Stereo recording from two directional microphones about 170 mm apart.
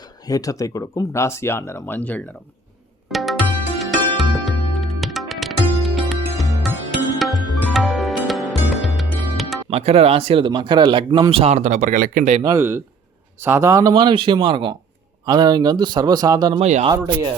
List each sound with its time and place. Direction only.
0.0 s speech: 20° left (ahead or behind)
3.1 s music: centre (ahead or behind)
9.6 s speech: 35° right (ahead or behind); by 12.3 s 55° right (ahead or behind)
12.4 s speech: 20° right (ahead or behind)
16.6 s speech: 40° right (ahead or behind)